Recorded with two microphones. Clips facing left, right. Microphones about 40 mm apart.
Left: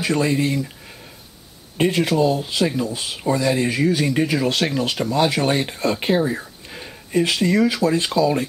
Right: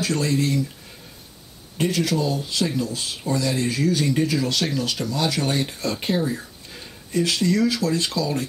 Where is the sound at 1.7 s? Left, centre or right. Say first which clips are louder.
Left 4 dB; left.